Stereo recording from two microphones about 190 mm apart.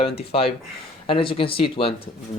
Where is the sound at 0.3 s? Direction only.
30° left (ahead or behind).